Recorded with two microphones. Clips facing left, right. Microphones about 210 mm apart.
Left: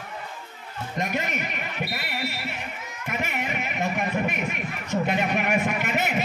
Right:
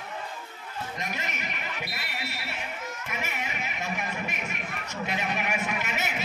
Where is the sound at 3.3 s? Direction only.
55° left (ahead or behind).